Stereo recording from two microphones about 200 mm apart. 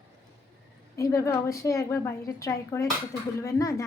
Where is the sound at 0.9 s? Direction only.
15° left (ahead or behind).